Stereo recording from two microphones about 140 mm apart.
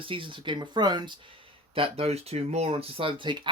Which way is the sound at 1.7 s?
45° right (ahead or behind).